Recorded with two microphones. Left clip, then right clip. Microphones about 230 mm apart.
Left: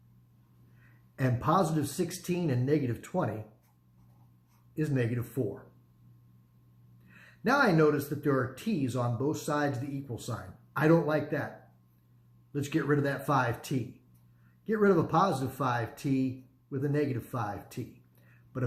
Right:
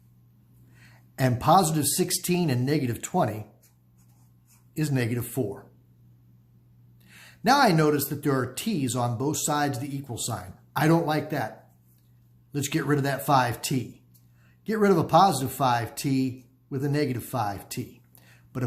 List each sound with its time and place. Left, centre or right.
1.1 s speech: right
4.7 s speech: right
7.1 s speech: right
12.5 s speech: right